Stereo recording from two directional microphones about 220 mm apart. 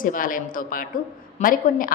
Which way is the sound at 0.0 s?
40° left (ahead or behind).